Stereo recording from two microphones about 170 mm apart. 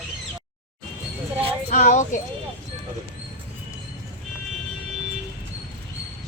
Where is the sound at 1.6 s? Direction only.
45° left (ahead or behind).